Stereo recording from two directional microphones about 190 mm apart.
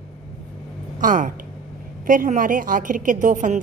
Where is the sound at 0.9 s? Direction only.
45° right (ahead or behind).